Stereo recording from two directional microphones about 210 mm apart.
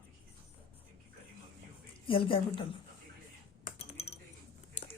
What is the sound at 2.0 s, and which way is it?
Speech, 25° left (ahead or behind).